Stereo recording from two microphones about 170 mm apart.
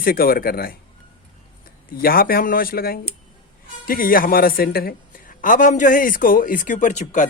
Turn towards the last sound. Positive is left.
turn(degrees=45)  # may be behind; listen again after turning